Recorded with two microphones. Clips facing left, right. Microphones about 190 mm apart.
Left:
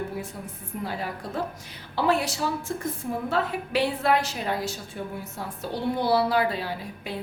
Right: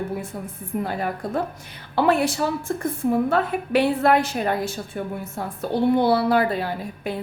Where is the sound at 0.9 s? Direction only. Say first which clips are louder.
Right 6 dB; 55° right (ahead or behind).